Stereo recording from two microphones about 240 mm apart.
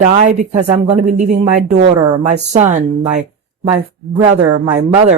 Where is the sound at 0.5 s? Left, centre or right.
Right.